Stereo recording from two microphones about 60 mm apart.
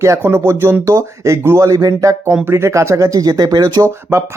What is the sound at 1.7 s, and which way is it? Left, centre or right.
Speech, right.